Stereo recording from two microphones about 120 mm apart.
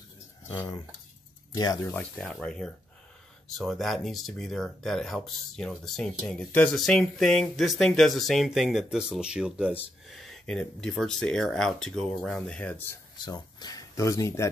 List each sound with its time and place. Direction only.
1.5 s speech: 35° left (ahead or behind)
1.9 s speech: 10° left (ahead or behind); by 9.8 s 10° right (ahead or behind)
10.0 s speech: centre (ahead or behind)
13.2 s speech: 35° left (ahead or behind)